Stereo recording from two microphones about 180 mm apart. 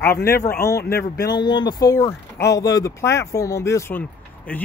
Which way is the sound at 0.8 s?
60° left (ahead or behind).